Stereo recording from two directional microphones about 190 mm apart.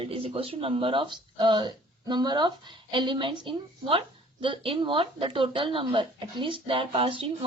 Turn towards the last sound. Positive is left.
turn(degrees=-25)  # may be behind; listen again after turning